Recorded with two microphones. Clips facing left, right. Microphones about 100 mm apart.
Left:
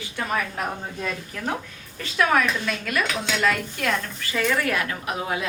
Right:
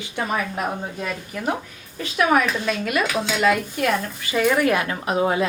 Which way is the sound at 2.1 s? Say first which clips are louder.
Right 2 dB; 15° right (ahead or behind).